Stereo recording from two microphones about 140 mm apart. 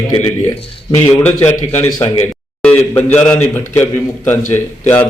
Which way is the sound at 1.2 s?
15° left (ahead or behind).